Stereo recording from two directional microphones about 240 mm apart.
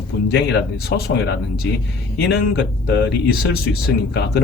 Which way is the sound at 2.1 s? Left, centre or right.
Left.